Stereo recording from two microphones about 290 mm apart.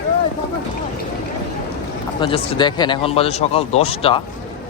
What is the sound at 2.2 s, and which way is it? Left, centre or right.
Speech, centre.